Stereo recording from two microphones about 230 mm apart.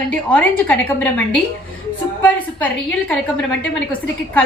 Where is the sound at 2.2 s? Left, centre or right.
Centre.